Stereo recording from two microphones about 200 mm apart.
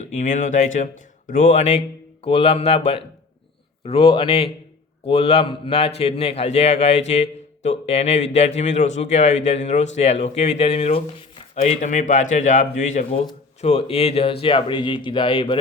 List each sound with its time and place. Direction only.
0.0 s speech: 35° left (ahead or behind)